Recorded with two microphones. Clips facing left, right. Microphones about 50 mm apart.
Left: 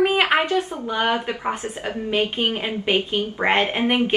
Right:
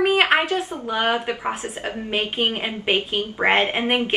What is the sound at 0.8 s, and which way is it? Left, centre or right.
Speech, centre.